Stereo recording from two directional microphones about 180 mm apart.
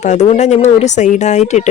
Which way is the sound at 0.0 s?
40° left (ahead or behind).